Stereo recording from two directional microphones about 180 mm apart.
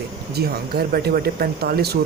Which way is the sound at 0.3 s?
60° right (ahead or behind).